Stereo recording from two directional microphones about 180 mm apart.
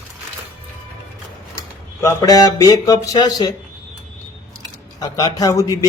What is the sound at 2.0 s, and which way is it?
A man's voice, 20° left (ahead or behind).